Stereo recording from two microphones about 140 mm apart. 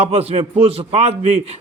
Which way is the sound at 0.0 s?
50° right (ahead or behind).